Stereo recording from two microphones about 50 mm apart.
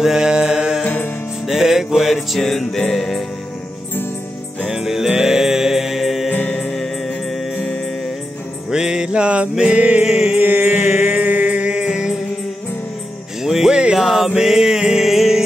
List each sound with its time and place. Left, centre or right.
0.0 s a sound: centre
0.8 s music: left
1.5 s music: centre
4.6 s music: centre
8.6 s music: centre
10.3 s music: right; by 12.2 s centre
13.4 s music: centre
13.9 s music: centre